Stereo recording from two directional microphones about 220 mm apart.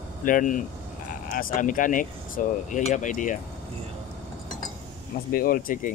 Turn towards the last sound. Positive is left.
turn(degrees=40)  # may be behind; listen again after turning